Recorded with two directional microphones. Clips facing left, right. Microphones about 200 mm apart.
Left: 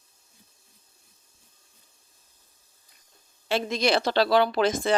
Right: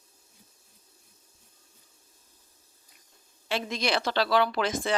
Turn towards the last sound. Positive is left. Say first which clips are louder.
# left 4 dB
turn(degrees=30)  # may be behind; listen again after turning